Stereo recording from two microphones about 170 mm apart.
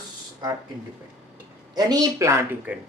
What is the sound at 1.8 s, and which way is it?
Speech, 25° right (ahead or behind).